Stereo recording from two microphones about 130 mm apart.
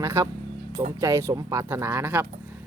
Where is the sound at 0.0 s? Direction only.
20° right (ahead or behind).